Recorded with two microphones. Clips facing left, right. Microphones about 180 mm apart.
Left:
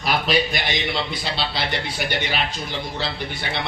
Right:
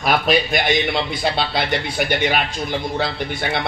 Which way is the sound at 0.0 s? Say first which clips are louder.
Right 3 dB; 55° right (ahead or behind).